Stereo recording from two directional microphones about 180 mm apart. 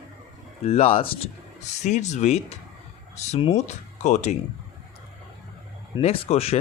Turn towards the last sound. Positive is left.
turn(degrees=35)  # may be behind; listen again after turning